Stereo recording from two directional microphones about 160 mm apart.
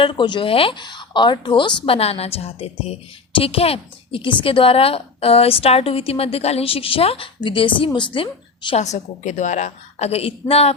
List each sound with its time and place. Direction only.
0.0 s a woman's voice: 30° left (ahead or behind)